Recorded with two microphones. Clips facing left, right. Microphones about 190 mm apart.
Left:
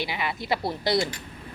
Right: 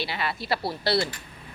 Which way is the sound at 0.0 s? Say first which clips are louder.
Even; 15° left (ahead or behind).